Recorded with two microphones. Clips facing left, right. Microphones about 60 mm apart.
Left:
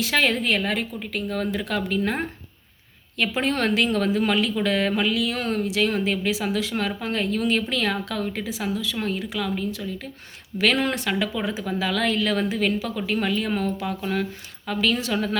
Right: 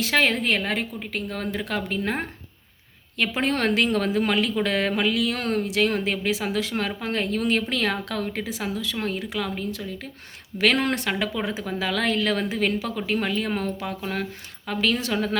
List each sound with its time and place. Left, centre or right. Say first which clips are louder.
0.0 s speech: even; right